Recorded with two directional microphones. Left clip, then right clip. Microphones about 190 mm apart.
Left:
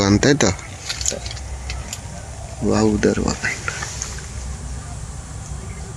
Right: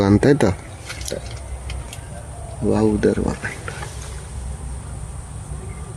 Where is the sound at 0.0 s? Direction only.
20° right (ahead or behind).